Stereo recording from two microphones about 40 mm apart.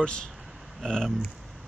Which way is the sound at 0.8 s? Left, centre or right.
Centre.